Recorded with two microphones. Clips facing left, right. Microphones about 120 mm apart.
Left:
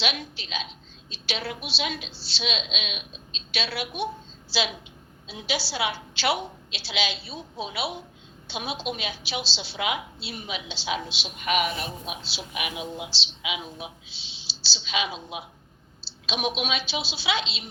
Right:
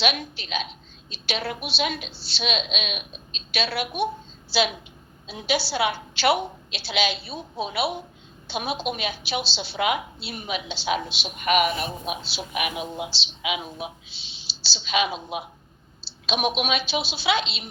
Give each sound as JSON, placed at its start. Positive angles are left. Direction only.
{"t": 0.0, "sound": "a woman's voice", "side_deg": -55}